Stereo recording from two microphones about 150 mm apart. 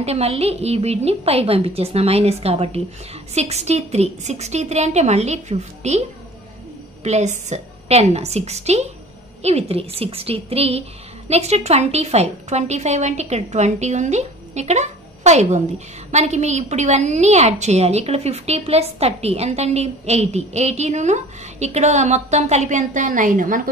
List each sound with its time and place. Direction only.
0.0 s a woman's voice: 45° right (ahead or behind); by 23.6 s 60° right (ahead or behind)